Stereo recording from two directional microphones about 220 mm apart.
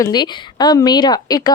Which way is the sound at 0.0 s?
20° left (ahead or behind).